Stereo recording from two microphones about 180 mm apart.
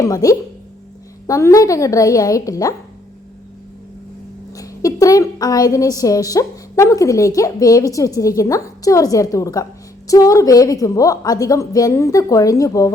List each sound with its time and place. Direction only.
0.0 s a woman's voice: 20° left (ahead or behind)
4.5 s a woman's voice: 20° left (ahead or behind)